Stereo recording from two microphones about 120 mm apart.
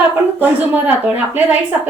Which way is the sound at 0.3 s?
15° right (ahead or behind).